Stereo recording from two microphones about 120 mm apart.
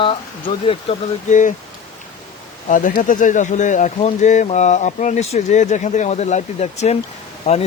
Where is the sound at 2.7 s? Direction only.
90° left; by 7.0 s 65° left (ahead or behind).